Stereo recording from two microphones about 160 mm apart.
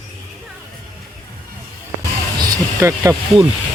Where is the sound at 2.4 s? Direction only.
25° right (ahead or behind).